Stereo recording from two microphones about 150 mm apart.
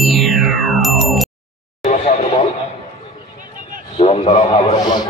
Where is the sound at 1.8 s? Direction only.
50° left (ahead or behind).